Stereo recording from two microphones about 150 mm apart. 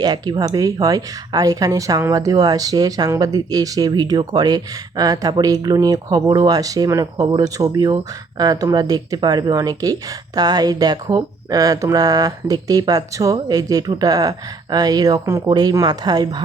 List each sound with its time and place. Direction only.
0.0 s speech: 25° right (ahead or behind)